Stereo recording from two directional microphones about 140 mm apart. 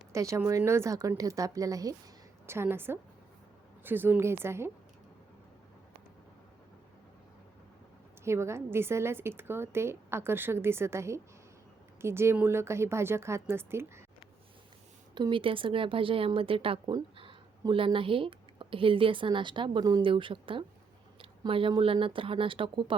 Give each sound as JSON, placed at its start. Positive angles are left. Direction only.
{"t": 0.1, "sound": "a woman's voice", "side_deg": -20}
{"t": 8.2, "sound": "a woman's voice", "side_deg": -20}
{"t": 15.1, "sound": "a woman's voice", "side_deg": -35}